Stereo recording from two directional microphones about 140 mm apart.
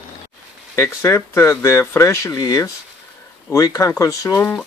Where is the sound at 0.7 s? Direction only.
20° left (ahead or behind).